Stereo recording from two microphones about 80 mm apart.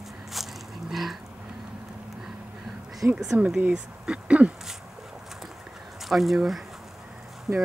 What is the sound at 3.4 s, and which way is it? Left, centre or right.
Speech, centre.